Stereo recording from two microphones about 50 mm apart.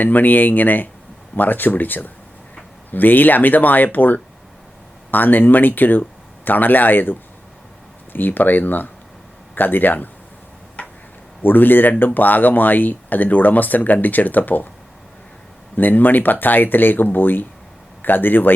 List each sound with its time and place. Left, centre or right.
0.0 s speech: left
11.4 s speech: left
15.7 s speech: left